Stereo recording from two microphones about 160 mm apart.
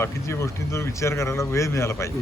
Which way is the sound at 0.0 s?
15° left (ahead or behind).